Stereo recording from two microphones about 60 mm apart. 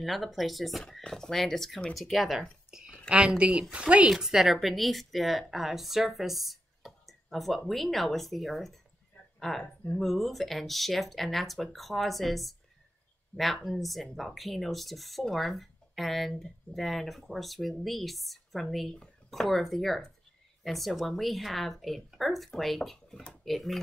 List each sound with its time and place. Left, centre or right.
0.0 s speech: centre
3.1 s speech: centre
13.3 s speech: left
13.7 s speech: centre